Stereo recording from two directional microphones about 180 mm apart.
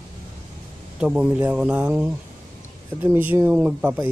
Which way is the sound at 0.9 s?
5° right (ahead or behind).